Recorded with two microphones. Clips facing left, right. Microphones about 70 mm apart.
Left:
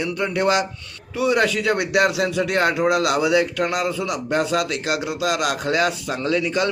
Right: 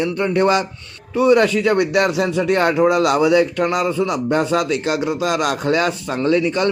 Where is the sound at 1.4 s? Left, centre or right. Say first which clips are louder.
Right 4 dB; left.